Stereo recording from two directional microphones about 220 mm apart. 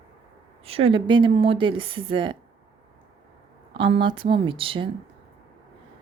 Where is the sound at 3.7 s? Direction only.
20° right (ahead or behind).